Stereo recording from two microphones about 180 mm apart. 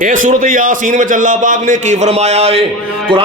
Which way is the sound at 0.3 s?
50° right (ahead or behind).